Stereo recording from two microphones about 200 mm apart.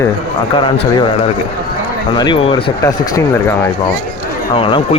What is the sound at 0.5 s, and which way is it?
Speech, 25° left (ahead or behind).